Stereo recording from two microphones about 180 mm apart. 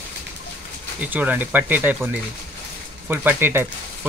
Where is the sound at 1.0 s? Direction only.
10° right (ahead or behind).